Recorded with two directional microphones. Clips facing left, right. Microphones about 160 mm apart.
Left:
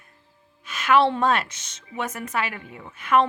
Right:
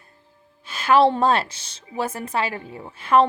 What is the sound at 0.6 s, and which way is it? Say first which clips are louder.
Speech: right 3 dB; 30° right (ahead or behind).